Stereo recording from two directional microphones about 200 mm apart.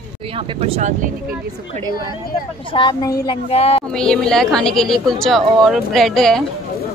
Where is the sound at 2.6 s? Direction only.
25° left (ahead or behind).